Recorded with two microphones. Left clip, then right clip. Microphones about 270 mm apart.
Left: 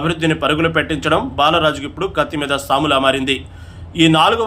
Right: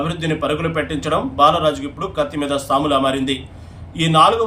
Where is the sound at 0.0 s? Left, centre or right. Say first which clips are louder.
Left 4 dB; centre.